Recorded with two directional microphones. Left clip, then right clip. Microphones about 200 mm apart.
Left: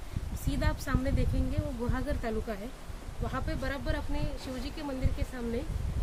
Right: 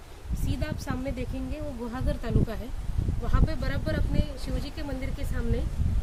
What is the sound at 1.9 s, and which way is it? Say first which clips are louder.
Speech: right 1 dB; 30° right (ahead or behind).